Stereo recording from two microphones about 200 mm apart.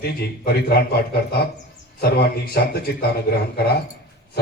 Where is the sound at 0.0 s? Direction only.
50° left (ahead or behind).